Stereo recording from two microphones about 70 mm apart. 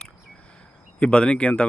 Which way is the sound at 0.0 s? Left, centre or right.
Centre.